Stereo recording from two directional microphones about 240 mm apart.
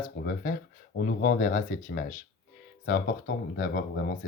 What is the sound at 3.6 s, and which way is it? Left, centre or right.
Speech, left.